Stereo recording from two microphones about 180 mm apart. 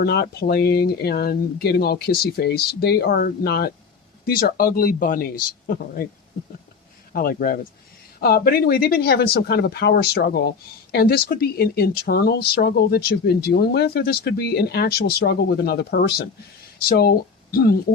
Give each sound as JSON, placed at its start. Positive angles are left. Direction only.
{"t": 0.0, "sound": "speech", "side_deg": 60}
{"t": 7.1, "sound": "speech", "side_deg": 55}